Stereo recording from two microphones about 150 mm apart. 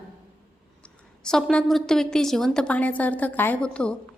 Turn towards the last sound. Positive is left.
turn(degrees=5)  # may be behind; listen again after turning